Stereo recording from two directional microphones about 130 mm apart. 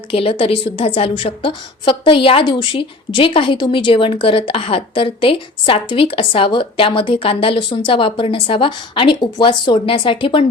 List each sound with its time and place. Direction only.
0.1 s a woman's voice: 45° left (ahead or behind)